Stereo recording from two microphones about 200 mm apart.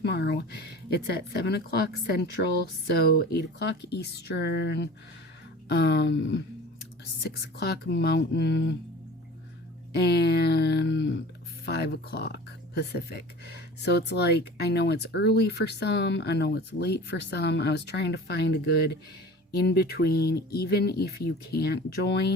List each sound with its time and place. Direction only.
0.0 s speech: 55° left (ahead or behind)
3.3 s speech: 55° left (ahead or behind)
7.6 s speech: 60° left (ahead or behind)
9.9 s speech: 55° left (ahead or behind)